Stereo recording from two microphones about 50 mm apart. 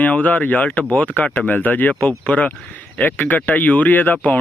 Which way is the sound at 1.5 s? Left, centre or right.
Left.